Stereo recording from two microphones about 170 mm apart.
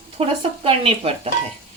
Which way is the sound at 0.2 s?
35° right (ahead or behind).